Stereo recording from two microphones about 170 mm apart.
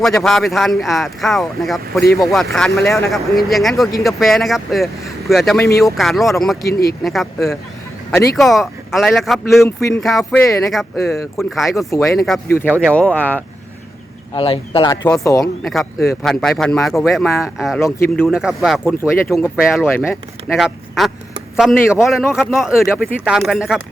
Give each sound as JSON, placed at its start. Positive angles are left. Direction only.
{"t": 0.0, "sound": "speech", "side_deg": 0}
{"t": 6.7, "sound": "speech", "side_deg": 65}
{"t": 7.0, "sound": "speech", "side_deg": 0}
{"t": 11.9, "sound": "speech", "side_deg": 15}
{"t": 12.8, "sound": "speech", "side_deg": 5}
{"t": 14.3, "sound": "speech", "side_deg": 35}
{"t": 15.2, "sound": "speech", "side_deg": 20}
{"t": 15.6, "sound": "speech", "side_deg": 0}
{"t": 17.7, "sound": "speech", "side_deg": 10}
{"t": 18.3, "sound": "speech", "side_deg": -5}
{"t": 18.9, "sound": "speech", "side_deg": 15}
{"t": 19.5, "sound": "speech", "side_deg": -5}